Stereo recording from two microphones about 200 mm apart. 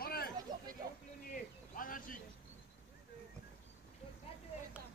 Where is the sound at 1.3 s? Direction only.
45° left (ahead or behind).